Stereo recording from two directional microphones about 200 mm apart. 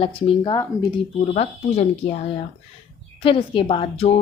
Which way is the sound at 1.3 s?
35° left (ahead or behind).